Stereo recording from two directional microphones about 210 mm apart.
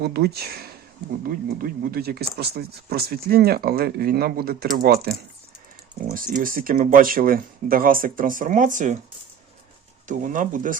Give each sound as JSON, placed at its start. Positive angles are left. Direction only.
{"t": 0.0, "sound": "speech", "side_deg": -50}
{"t": 10.1, "sound": "speech", "side_deg": -40}